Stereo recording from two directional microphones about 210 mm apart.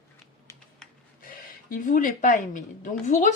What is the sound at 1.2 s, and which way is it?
Speech, 40° left (ahead or behind).